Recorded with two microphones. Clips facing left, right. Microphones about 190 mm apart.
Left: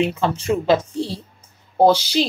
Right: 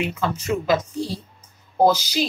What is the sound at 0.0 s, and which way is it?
Speech, 25° left (ahead or behind).